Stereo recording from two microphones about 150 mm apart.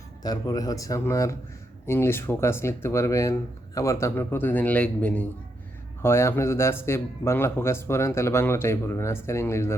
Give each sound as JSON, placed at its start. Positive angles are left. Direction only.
{"t": 0.2, "sound": "speech", "side_deg": 25}